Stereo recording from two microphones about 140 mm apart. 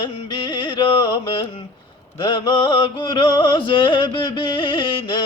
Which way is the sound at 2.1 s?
35° left (ahead or behind).